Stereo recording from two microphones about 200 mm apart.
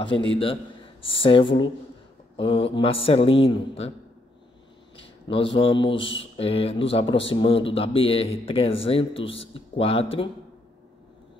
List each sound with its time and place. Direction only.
0.0 s speech: 25° left (ahead or behind)
4.9 s speech: 25° left (ahead or behind)